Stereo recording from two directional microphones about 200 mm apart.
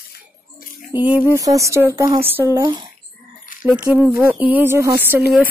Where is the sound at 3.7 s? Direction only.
5° right (ahead or behind).